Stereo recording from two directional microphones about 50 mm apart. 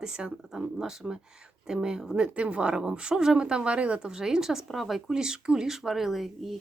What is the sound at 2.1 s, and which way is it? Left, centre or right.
Speech, right.